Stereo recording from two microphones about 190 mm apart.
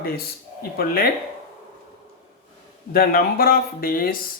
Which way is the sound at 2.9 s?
50° left (ahead or behind).